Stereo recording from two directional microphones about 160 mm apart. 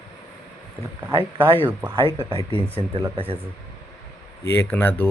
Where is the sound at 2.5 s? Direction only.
40° right (ahead or behind).